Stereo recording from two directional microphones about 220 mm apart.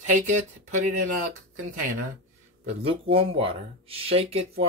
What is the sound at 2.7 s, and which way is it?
Speech, 25° right (ahead or behind).